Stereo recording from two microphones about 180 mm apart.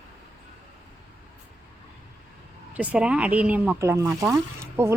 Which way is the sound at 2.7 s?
5° right (ahead or behind).